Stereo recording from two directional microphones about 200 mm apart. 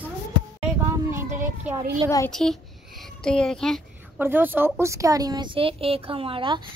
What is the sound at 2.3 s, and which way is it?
Speech, centre (ahead or behind).